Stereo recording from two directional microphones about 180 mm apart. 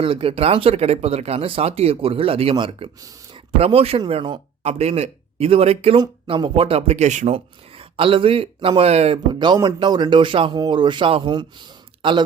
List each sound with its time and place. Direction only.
0.0 s speech: 30° right (ahead or behind)
9.1 s speech: 25° right (ahead or behind)